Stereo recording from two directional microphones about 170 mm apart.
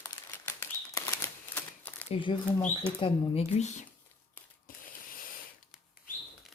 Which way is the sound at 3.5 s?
40° left (ahead or behind).